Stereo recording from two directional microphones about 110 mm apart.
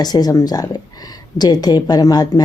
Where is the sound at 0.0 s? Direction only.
40° left (ahead or behind).